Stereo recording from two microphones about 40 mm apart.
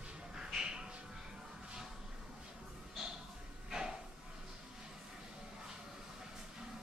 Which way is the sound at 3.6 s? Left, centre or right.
Centre.